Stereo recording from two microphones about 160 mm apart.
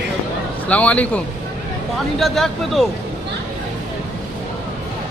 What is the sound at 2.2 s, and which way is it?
Speech, centre (ahead or behind).